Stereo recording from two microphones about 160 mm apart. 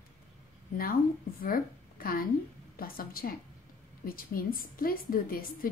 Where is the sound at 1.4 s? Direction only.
65° left (ahead or behind).